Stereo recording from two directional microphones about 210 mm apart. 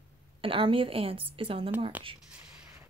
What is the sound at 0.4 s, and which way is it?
A woman's voice, 25° right (ahead or behind).